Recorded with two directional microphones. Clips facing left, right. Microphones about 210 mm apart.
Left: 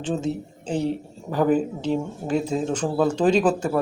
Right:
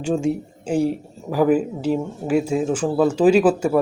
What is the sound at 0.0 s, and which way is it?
Speech, 10° right (ahead or behind).